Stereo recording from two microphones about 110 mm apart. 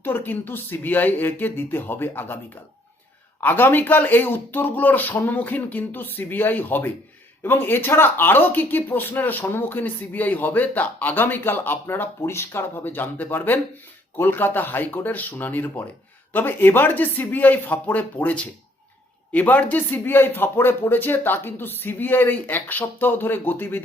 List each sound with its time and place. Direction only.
0.0 s speech: 20° left (ahead or behind)
3.4 s speech: 20° left (ahead or behind)